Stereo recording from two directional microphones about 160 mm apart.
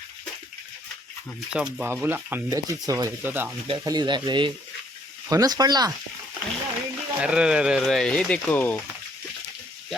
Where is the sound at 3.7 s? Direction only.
30° right (ahead or behind).